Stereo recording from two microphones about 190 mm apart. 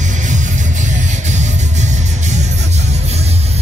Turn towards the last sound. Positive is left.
turn(degrees=-35)  # may be behind; listen again after turning